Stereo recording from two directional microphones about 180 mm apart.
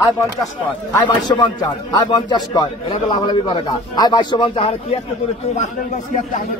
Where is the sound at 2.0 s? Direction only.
20° left (ahead or behind).